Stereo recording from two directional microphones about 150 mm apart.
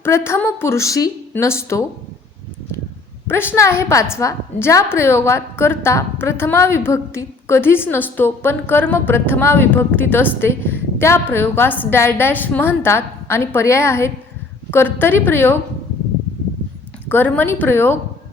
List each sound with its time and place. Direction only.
0.0 s a woman's voice: 15° left (ahead or behind)
3.2 s a woman's voice: 15° left (ahead or behind)
17.1 s a woman's voice: 10° left (ahead or behind)